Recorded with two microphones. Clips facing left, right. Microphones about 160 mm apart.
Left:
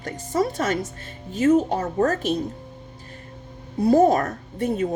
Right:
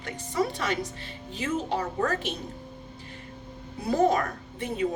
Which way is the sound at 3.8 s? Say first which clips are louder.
Left 7 dB; 40° left (ahead or behind).